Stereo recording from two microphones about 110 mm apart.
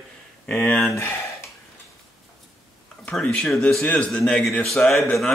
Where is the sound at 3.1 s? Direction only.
5° left (ahead or behind).